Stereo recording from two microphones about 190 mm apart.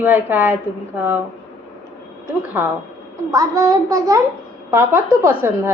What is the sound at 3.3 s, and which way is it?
A woman's voice, 15° right (ahead or behind).